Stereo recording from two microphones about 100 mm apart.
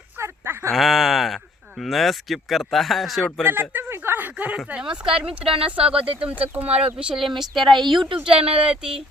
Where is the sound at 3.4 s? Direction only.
20° right (ahead or behind).